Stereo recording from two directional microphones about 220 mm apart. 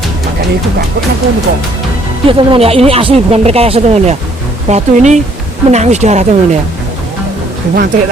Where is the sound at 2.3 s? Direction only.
25° right (ahead or behind).